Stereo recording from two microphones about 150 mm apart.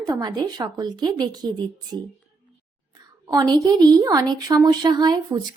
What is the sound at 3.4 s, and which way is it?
A woman's voice, 25° right (ahead or behind).